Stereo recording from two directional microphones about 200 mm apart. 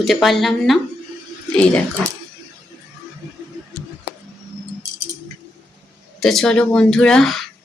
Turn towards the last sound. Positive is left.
turn(degrees=0)  # may be behind; listen again after turning